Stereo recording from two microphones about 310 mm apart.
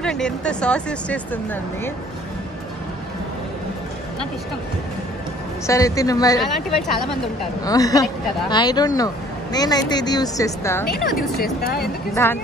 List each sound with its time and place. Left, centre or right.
0.0 s speech: centre
5.7 s speech: centre
6.4 s speech: centre
7.6 s speech: centre
11.6 s speech: left
12.1 s speech: centre